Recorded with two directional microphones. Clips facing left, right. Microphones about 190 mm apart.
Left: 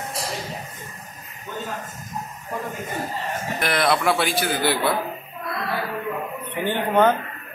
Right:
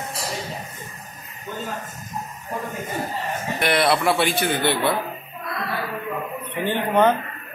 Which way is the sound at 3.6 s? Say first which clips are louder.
Right 2 dB; centre (ahead or behind).